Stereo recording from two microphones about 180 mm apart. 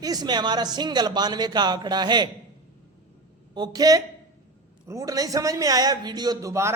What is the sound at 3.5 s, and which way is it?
A man's voice, 25° right (ahead or behind).